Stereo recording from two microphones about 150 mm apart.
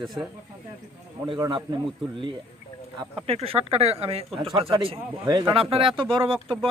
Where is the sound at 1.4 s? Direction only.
30° right (ahead or behind).